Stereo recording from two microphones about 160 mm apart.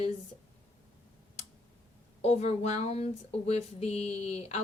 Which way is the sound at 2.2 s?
40° left (ahead or behind).